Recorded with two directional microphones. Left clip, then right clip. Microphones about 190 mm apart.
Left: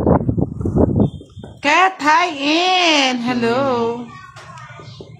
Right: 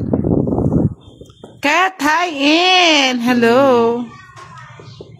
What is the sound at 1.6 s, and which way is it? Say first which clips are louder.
A woman's voice: even; 40° right (ahead or behind).